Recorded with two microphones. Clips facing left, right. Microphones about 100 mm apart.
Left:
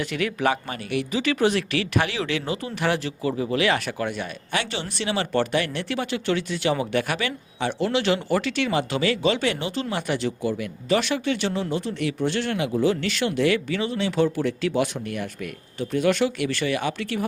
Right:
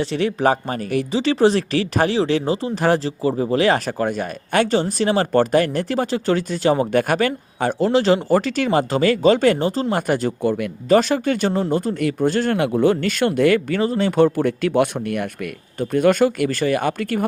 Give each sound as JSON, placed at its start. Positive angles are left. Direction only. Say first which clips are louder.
{"t": 0.0, "sound": "speech", "louder": "right 5 dB", "side_deg": -30}